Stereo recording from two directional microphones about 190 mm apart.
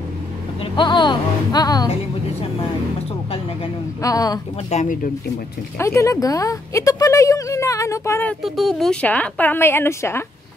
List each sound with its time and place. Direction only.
0.7 s speech: 25° left (ahead or behind)
4.0 s speech: 20° left (ahead or behind)
4.6 s speech: 40° left (ahead or behind)
5.8 s a woman's voice: 15° left (ahead or behind)
8.4 s a woman's voice: centre (ahead or behind)